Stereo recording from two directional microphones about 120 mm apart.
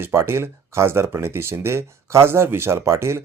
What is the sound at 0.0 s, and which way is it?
Speech, 20° right (ahead or behind).